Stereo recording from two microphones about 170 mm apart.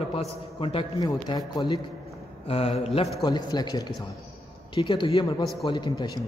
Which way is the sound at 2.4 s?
35° left (ahead or behind).